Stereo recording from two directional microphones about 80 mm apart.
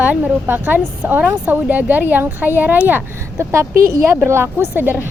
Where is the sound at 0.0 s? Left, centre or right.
Right.